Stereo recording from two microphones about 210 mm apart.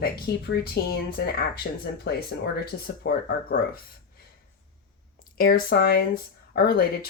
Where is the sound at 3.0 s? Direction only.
45° left (ahead or behind).